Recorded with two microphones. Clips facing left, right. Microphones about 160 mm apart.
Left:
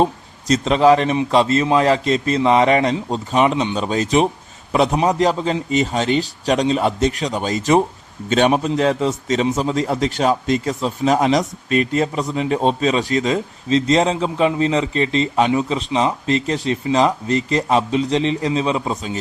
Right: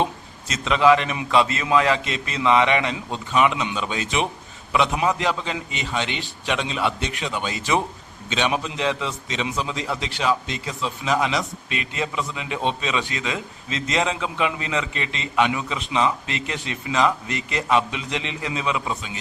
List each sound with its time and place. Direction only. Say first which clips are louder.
0.0 s a man's voice: left 6 dB; 40° left (ahead or behind)